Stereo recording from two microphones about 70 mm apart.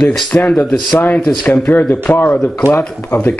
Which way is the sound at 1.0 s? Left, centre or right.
Left.